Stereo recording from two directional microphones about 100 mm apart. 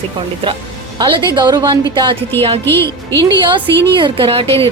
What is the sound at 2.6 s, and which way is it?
Speech, 25° left (ahead or behind).